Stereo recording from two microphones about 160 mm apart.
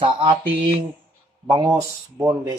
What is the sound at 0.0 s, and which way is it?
Speech, 30° right (ahead or behind).